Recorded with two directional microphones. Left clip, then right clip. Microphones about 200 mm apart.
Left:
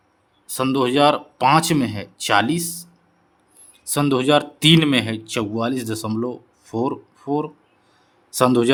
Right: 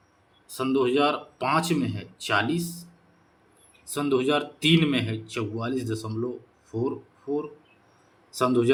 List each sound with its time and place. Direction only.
0.5 s speech: 55° left (ahead or behind)
3.9 s speech: 55° left (ahead or behind)